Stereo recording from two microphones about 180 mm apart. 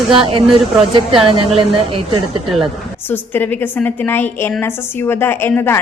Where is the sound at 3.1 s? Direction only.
10° left (ahead or behind).